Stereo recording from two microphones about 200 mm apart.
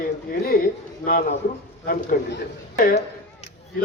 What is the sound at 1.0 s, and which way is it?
A man's voice, 45° left (ahead or behind).